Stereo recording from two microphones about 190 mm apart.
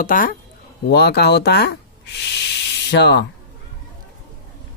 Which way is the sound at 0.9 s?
60° left (ahead or behind).